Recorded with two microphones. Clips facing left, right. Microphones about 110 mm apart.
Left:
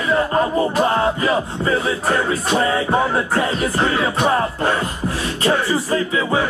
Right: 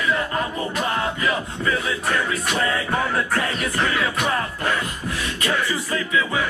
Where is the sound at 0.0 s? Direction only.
35° left (ahead or behind).